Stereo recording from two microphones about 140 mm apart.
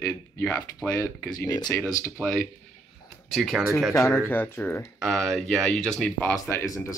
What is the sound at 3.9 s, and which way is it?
Speech, 20° left (ahead or behind).